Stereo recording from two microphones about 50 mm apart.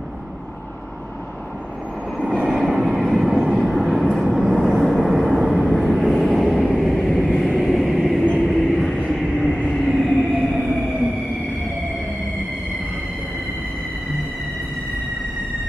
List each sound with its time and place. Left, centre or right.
2.4 s train: centre
3.4 s vehicle: centre
8.2 s train: centre
8.5 s train: centre
9.8 s a sound: centre